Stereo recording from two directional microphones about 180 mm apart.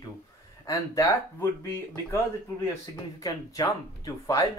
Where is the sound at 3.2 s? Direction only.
20° left (ahead or behind).